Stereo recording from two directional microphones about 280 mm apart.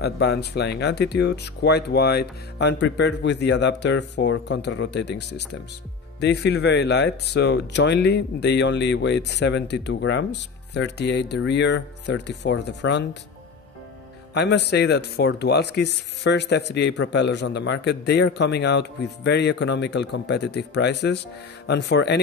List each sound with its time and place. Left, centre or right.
0.0 s speech: left
14.3 s speech: left